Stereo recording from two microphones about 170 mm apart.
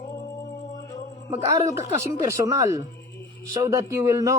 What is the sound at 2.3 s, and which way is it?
Speech, 20° right (ahead or behind).